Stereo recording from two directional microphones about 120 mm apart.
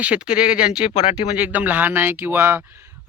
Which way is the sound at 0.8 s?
60° left (ahead or behind).